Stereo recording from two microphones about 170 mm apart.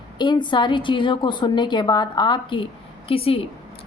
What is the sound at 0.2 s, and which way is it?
A woman's voice, 25° left (ahead or behind).